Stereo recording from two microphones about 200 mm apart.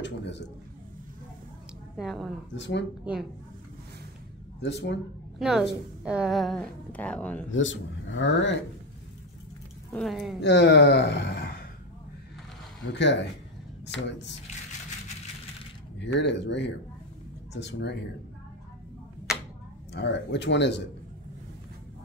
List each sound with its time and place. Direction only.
0.0 s a man's voice: 60° left (ahead or behind)
2.0 s a woman's voice: centre (ahead or behind)
2.5 s speech: 60° left (ahead or behind)
3.1 s speech: 5° right (ahead or behind)
4.6 s speech: 60° left (ahead or behind)
5.4 s a woman's voice: 5° right (ahead or behind)
7.5 s a man's voice: 70° left (ahead or behind)
9.9 s a woman's voice: centre (ahead or behind)
10.4 s speech: 60° left (ahead or behind)
12.9 s speech: 60° left (ahead or behind)
16.0 s speech: 60° left (ahead or behind)
19.9 s speech: 60° left (ahead or behind)